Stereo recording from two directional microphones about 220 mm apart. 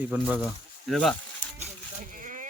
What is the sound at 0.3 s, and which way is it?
Speech, 5° left (ahead or behind).